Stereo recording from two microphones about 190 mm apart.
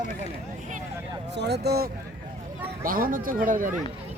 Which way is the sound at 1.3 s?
60° right (ahead or behind).